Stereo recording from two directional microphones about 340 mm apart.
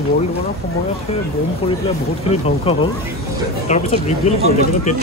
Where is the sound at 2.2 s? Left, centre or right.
Centre.